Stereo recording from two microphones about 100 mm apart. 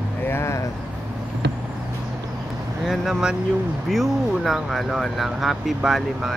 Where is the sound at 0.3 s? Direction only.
25° left (ahead or behind).